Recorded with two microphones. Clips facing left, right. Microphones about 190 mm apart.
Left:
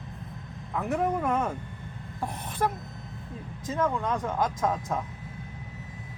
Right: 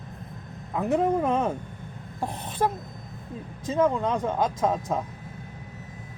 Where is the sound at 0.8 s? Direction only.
25° right (ahead or behind).